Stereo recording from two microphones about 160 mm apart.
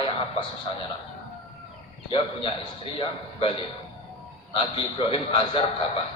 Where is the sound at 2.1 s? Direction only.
35° left (ahead or behind).